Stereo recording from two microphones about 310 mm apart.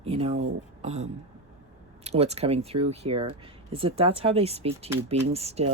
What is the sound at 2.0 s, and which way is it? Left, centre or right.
Speech, centre.